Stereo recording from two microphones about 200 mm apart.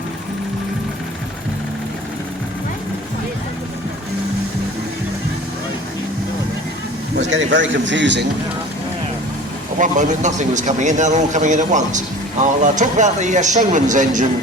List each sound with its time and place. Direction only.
7.2 s speech: 65° right (ahead or behind)
9.7 s a man's voice: 40° right (ahead or behind)